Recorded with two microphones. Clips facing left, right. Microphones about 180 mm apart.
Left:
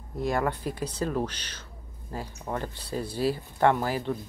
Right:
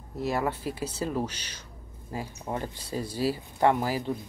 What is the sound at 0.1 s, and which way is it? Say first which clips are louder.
Speech: left 1 dB; 5° right (ahead or behind).